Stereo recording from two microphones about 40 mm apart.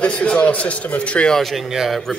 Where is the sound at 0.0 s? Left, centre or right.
Left.